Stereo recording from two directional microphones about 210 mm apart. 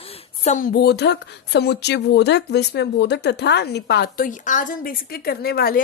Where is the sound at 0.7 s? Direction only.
50° left (ahead or behind).